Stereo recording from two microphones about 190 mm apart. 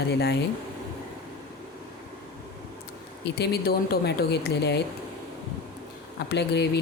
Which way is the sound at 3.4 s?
55° left (ahead or behind).